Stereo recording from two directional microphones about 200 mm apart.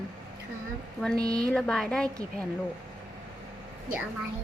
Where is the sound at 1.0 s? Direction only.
5° left (ahead or behind).